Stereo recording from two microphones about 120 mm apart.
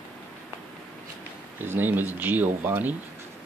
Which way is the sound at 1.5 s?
15° right (ahead or behind).